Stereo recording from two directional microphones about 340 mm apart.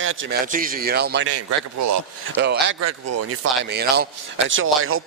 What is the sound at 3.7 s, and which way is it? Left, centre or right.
Speech, right.